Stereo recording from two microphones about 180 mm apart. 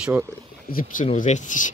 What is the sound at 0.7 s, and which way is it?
Speech, 50° left (ahead or behind).